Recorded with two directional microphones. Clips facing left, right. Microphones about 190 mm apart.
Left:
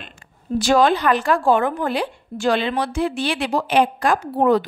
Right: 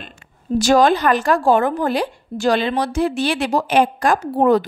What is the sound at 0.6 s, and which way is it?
A woman's voice, 40° right (ahead or behind).